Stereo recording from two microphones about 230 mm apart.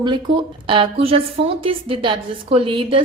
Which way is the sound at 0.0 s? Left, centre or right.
Centre.